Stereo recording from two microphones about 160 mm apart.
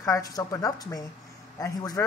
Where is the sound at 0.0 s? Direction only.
20° left (ahead or behind).